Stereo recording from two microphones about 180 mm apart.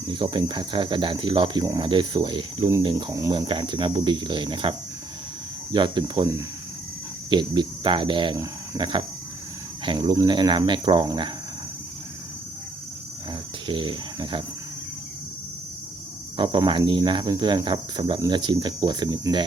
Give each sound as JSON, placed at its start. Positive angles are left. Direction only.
{"t": 0.1, "sound": "speech", "side_deg": -25}
{"t": 5.7, "sound": "speech", "side_deg": -25}
{"t": 7.3, "sound": "speech", "side_deg": -25}
{"t": 13.7, "sound": "speech", "side_deg": -25}
{"t": 16.4, "sound": "speech", "side_deg": -25}